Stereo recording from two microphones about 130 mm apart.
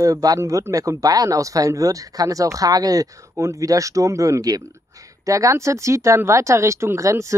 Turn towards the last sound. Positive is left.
turn(degrees=-25)  # may be behind; listen again after turning